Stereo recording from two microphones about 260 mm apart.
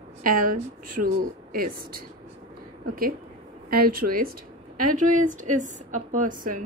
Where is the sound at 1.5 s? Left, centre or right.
Right.